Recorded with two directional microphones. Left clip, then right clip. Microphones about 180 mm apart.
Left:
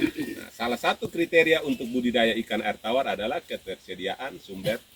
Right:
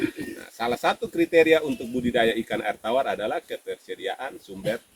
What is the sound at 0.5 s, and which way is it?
Speech, 20° right (ahead or behind).